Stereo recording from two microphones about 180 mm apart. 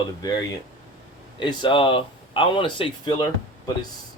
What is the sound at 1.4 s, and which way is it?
Speech, 25° left (ahead or behind).